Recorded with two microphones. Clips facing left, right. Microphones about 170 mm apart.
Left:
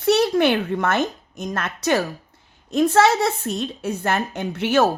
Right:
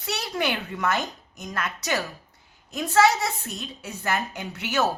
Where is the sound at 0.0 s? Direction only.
60° left (ahead or behind).